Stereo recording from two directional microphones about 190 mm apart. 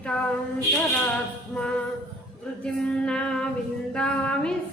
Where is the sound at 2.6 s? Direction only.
5° left (ahead or behind).